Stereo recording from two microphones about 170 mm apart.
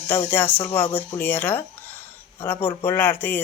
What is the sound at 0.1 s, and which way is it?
Speech, 10° left (ahead or behind).